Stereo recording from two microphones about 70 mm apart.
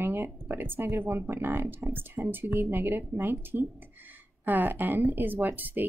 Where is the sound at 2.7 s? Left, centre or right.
Right.